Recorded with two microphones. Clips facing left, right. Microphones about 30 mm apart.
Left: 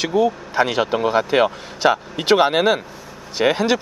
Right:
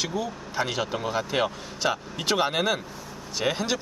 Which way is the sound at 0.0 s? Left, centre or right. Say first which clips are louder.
Left 11 dB; left.